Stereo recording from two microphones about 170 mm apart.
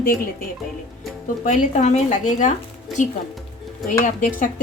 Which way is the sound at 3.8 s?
50° left (ahead or behind).